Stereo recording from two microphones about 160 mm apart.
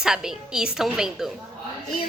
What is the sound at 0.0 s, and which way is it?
A woman's voice, 5° right (ahead or behind).